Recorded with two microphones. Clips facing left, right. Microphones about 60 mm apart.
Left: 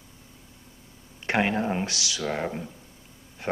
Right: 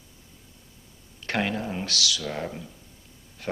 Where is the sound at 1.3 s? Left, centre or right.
Left.